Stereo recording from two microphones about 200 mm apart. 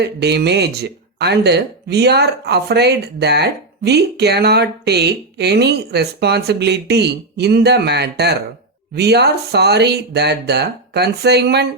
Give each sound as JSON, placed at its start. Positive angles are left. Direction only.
{"t": 0.0, "sound": "speech", "side_deg": -55}